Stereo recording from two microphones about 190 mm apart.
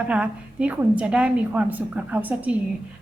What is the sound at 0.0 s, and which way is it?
A woman's voice, 5° right (ahead or behind).